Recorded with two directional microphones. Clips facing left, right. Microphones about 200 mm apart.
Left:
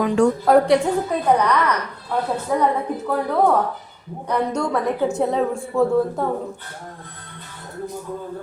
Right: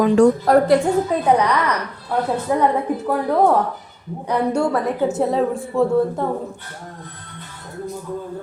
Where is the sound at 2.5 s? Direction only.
10° right (ahead or behind).